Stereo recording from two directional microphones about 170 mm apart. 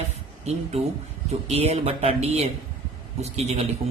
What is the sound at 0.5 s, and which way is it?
A man's voice, 40° right (ahead or behind).